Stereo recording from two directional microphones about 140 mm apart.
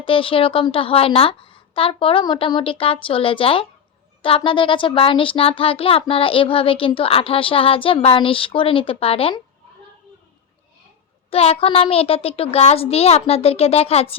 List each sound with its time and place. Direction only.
0.0 s speech: 40° left (ahead or behind)
11.3 s a child's voice: 45° left (ahead or behind)